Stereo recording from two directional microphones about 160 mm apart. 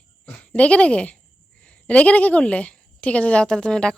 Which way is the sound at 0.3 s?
5° left (ahead or behind).